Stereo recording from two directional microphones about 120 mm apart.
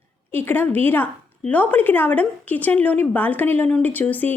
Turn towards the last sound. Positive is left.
turn(degrees=15)  # may be behind; listen again after turning